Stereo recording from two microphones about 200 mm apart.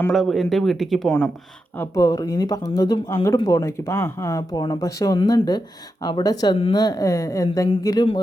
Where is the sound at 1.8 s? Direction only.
15° left (ahead or behind).